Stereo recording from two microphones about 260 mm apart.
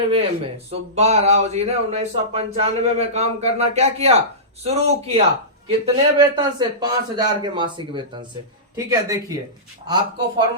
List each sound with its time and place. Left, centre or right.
0.7 s a man's voice: right